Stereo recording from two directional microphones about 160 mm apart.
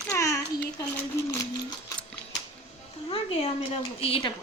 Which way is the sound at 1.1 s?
15° left (ahead or behind).